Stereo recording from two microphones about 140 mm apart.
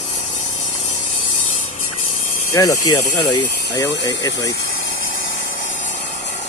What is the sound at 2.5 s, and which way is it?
Speech, 25° left (ahead or behind).